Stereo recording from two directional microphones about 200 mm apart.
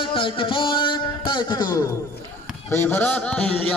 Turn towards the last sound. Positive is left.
turn(degrees=5)  # may be behind; listen again after turning